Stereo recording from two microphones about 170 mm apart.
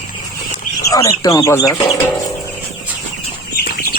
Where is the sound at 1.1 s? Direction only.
25° left (ahead or behind).